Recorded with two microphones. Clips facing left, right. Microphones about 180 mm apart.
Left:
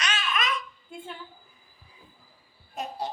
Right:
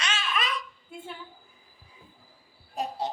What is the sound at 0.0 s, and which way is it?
Babbling, 30° right (ahead or behind).